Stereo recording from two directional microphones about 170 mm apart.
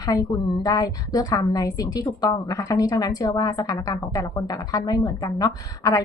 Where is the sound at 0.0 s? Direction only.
20° left (ahead or behind).